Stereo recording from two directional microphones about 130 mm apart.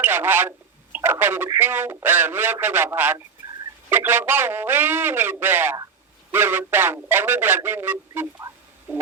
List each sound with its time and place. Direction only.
0.0 s speech: 15° right (ahead or behind)